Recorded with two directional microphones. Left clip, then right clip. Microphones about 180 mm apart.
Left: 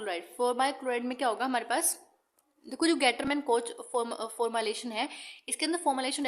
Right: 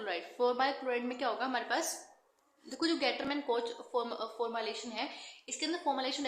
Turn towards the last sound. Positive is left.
turn(degrees=55)  # may be behind; listen again after turning